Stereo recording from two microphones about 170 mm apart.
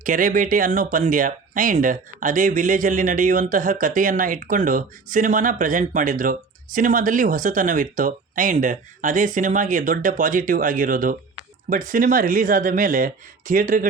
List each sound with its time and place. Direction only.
0.0 s speech: 50° right (ahead or behind)